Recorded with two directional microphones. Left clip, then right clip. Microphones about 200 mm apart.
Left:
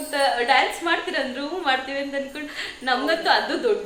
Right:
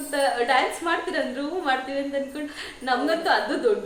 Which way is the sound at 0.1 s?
10° right (ahead or behind).